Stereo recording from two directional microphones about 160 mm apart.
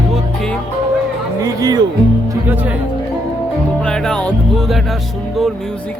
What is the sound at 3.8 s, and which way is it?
Music, 5° left (ahead or behind).